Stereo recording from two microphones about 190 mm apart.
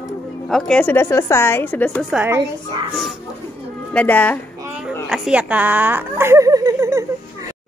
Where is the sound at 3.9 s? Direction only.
10° left (ahead or behind).